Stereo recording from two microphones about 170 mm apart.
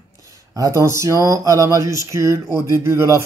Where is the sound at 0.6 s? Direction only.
20° right (ahead or behind).